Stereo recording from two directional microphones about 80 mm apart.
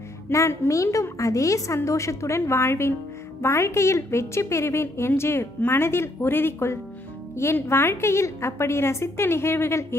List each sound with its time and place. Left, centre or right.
0.3 s a woman's voice: left